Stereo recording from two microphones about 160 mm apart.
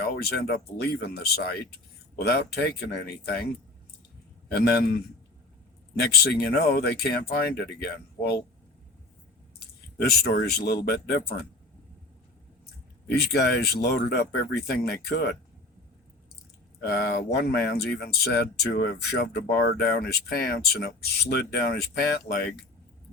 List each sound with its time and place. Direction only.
0.0 s speech: 85° left
2.2 s speech: 90° left
4.5 s speech: 80° left
6.0 s speech: 85° left
10.0 s speech: 80° left
13.1 s speech: 90° left
16.8 s speech: 85° left